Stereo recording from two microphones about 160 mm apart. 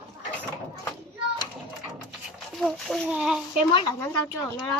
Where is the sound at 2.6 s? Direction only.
Centre (ahead or behind).